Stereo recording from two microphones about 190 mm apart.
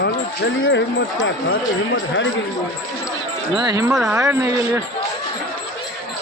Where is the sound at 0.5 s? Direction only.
80° left.